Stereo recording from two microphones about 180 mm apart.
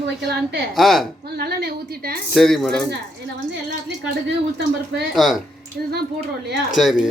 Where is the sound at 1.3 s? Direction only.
60° right (ahead or behind).